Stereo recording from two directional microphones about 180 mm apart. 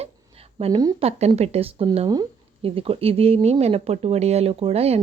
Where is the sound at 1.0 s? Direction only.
35° right (ahead or behind).